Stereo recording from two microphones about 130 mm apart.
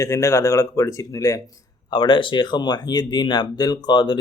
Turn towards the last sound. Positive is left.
turn(degrees=35)  # may be behind; listen again after turning